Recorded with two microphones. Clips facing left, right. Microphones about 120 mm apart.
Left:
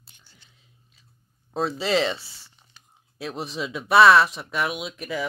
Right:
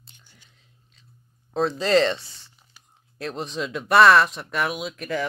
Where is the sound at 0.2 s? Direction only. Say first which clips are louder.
Right 1 dB; 15° right (ahead or behind).